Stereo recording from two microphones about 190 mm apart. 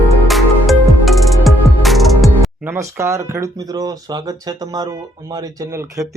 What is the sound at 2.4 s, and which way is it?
Speech, 10° right (ahead or behind).